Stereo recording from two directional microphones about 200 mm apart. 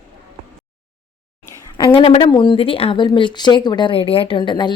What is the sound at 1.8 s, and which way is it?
Speech, 25° left (ahead or behind).